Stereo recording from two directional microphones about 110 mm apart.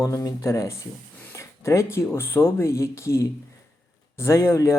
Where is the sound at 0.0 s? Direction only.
30° left (ahead or behind).